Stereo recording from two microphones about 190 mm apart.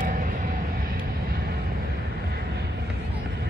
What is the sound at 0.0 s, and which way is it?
Vehicle, 45° right (ahead or behind).